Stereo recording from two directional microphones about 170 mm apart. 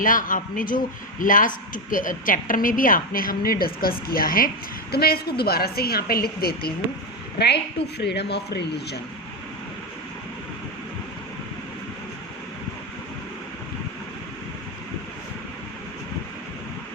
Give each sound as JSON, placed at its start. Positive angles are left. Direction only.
{"t": 0.0, "sound": "a man's voice", "side_deg": 50}
{"t": 7.3, "sound": "speech", "side_deg": 75}